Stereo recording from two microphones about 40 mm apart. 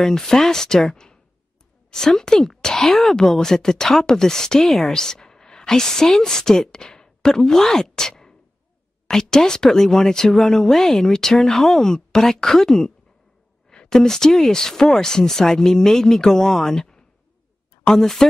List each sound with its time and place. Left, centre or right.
0.0 s speech: centre